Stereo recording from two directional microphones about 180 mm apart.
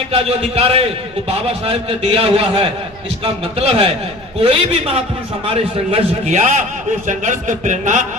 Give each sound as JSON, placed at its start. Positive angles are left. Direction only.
{"t": 0.1, "sound": "a man's voice", "side_deg": -35}